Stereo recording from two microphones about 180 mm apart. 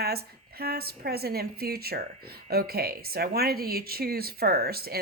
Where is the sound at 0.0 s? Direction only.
60° right (ahead or behind).